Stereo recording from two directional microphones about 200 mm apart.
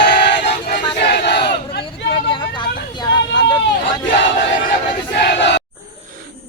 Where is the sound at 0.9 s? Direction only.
55° left (ahead or behind).